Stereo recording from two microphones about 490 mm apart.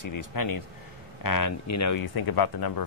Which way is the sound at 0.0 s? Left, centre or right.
Left.